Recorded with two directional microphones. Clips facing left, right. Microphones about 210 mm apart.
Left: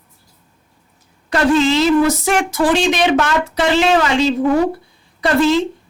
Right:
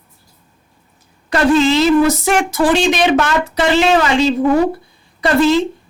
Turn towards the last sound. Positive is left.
turn(degrees=-5)  # may be behind; listen again after turning